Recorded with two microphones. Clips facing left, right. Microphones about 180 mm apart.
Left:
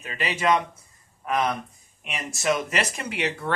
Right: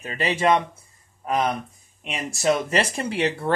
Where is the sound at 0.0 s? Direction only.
35° right (ahead or behind).